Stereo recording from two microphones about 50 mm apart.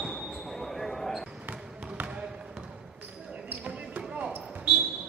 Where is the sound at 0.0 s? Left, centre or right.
Centre.